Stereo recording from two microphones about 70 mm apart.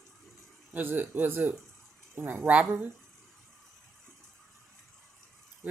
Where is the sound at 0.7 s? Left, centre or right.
Right.